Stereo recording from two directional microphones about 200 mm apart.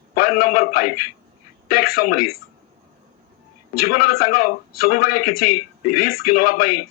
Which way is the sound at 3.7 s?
45° left (ahead or behind).